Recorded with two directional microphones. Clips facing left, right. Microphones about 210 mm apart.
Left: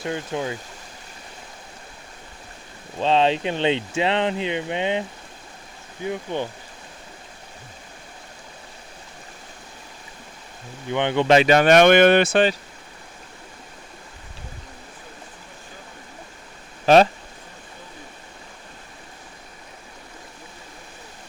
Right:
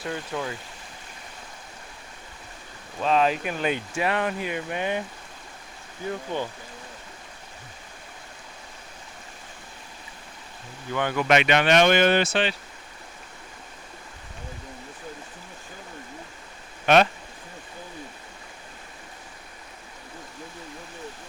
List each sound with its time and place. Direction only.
0.0 s speech: 20° left (ahead or behind)
3.0 s speech: 25° left (ahead or behind)
6.1 s speech: 20° left (ahead or behind)
10.9 s speech: 25° left (ahead or behind); by 12.5 s 50° left (ahead or behind)
16.8 s speech: 35° left (ahead or behind)